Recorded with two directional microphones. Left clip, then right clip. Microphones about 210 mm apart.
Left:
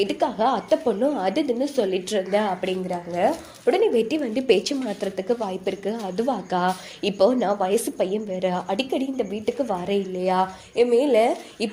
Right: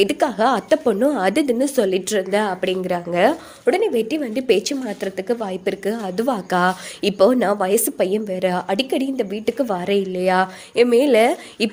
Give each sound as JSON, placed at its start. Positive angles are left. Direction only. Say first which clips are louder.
{"t": 0.0, "sound": "a woman's voice", "louder": "right 4 dB", "side_deg": -35}
{"t": 2.9, "sound": "speech", "louder": "right 6 dB", "side_deg": -50}
{"t": 3.7, "sound": "a woman's voice", "louder": "right 2 dB", "side_deg": -10}